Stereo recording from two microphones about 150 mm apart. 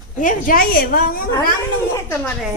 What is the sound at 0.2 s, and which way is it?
A woman's voice, 65° left (ahead or behind).